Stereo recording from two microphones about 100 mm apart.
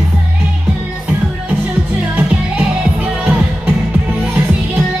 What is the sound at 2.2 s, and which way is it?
Music, 10° right (ahead or behind).